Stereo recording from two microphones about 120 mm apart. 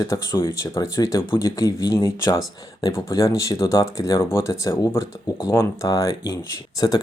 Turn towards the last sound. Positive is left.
turn(degrees=40)  # may be behind; listen again after turning